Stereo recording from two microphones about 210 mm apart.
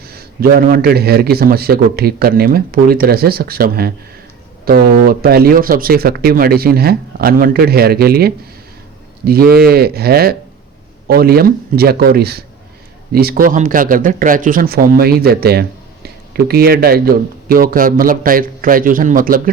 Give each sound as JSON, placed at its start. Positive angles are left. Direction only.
{"t": 0.0, "sound": "a man's voice", "side_deg": -45}